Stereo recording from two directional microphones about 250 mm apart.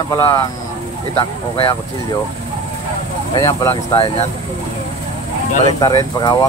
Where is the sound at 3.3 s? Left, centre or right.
Centre.